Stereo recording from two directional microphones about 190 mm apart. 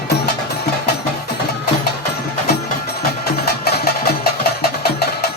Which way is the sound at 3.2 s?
55° left (ahead or behind).